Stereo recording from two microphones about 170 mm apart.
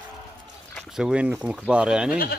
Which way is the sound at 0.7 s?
5° right (ahead or behind).